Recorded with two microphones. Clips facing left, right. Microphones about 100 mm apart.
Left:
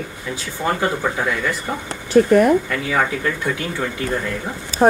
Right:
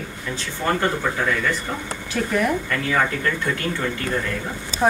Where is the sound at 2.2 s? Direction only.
45° left (ahead or behind).